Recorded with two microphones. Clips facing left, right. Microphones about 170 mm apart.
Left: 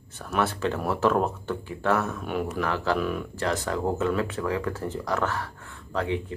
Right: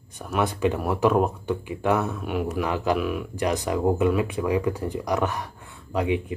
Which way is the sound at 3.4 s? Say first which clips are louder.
Right 4 dB; 15° right (ahead or behind).